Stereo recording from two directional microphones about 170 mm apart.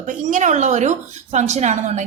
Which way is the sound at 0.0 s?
50° right (ahead or behind).